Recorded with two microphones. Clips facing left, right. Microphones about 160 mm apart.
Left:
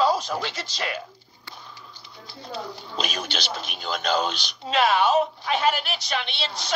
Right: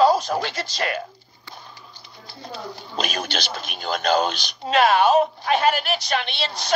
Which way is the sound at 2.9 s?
45° right (ahead or behind).